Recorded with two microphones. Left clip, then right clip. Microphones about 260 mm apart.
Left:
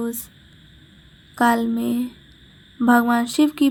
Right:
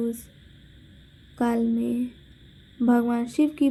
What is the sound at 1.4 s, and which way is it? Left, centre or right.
A woman's voice, left.